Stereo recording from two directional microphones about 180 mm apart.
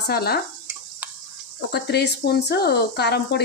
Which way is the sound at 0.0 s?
60° left (ahead or behind).